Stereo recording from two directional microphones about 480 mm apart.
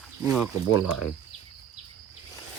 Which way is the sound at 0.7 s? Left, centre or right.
Left.